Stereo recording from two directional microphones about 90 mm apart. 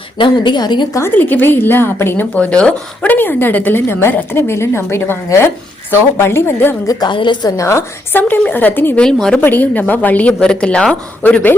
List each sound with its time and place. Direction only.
0.2 s a woman's voice: 55° left (ahead or behind)
0.9 s a woman's voice: 25° left (ahead or behind)
6.8 s a woman's voice: 50° left (ahead or behind)
7.4 s a woman's voice: 35° left (ahead or behind)
8.3 s a woman's voice: 20° left (ahead or behind)
9.0 s speech: 5° left (ahead or behind)
9.4 s speech: 20° left (ahead or behind)